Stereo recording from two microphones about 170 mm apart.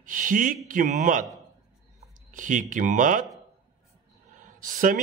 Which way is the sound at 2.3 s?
50° right (ahead or behind).